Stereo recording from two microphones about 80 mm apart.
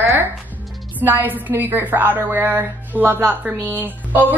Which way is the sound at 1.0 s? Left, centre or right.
Right.